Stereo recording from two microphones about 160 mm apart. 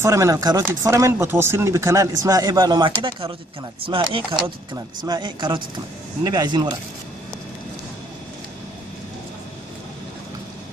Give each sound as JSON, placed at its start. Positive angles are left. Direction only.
{"t": 0.0, "sound": "speech", "side_deg": -20}